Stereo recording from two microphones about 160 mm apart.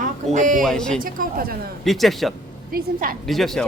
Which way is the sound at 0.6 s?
5° left (ahead or behind).